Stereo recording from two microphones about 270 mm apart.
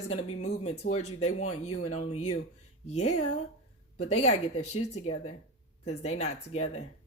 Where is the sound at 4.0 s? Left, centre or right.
Left.